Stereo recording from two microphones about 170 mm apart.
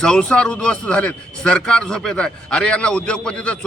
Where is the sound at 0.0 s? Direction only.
5° left (ahead or behind).